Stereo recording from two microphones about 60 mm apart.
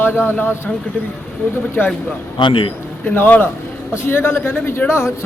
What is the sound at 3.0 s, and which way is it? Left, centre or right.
Speech, left.